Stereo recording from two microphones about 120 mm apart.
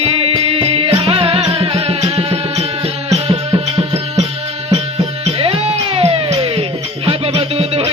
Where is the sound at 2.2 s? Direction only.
60° right (ahead or behind).